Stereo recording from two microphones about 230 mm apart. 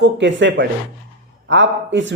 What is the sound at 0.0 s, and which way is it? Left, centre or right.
A man's voice, right.